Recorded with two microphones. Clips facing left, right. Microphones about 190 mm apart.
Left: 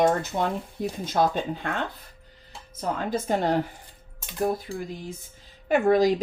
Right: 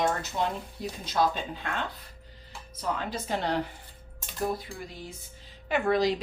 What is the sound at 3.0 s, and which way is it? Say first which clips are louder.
Speech: left 6 dB; 45° left (ahead or behind).